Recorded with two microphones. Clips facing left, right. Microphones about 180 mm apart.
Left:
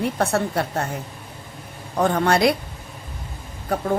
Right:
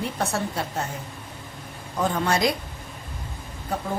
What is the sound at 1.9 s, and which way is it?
Speech, 60° left (ahead or behind).